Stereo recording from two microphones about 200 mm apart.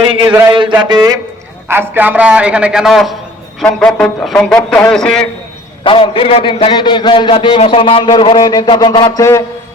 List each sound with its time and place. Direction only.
0.1 s a man's voice: 20° right (ahead or behind); by 5.3 s 5° left (ahead or behind)
5.8 s a man's voice: 25° left (ahead or behind)